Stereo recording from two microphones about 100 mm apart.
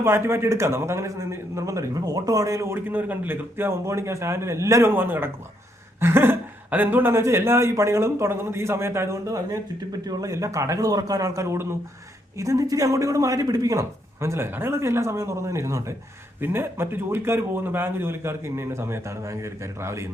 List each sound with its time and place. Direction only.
0.0 s speech: 25° right (ahead or behind)